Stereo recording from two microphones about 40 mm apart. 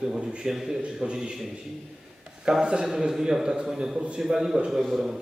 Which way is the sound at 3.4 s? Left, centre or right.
Right.